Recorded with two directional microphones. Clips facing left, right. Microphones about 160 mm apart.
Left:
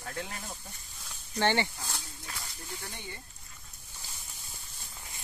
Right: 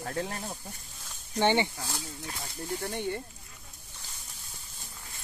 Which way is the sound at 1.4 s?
15° right (ahead or behind).